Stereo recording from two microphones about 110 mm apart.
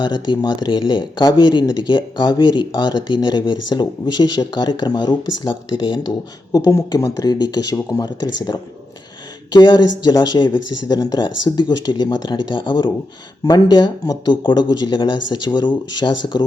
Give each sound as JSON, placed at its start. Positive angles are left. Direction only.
{"t": 0.0, "sound": "speech", "side_deg": 45}
{"t": 6.1, "sound": "speech", "side_deg": 35}